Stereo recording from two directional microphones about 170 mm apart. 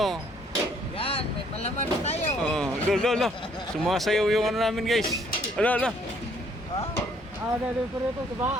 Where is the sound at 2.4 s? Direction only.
5° left (ahead or behind).